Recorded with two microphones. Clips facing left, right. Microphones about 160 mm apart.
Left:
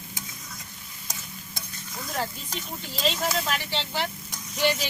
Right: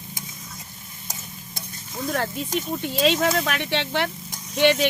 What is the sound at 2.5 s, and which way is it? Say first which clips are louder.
Speech: right 10 dB; 20° right (ahead or behind).